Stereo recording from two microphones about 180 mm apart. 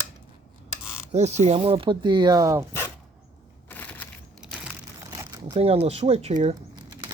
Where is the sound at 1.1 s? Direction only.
40° right (ahead or behind); by 2.6 s 15° right (ahead or behind).